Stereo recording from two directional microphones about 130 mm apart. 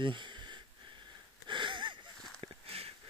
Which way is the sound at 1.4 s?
35° right (ahead or behind).